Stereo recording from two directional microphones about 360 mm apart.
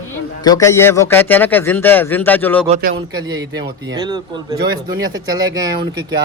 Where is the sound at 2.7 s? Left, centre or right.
Right.